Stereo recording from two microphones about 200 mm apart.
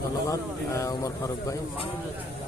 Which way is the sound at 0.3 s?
15° left (ahead or behind).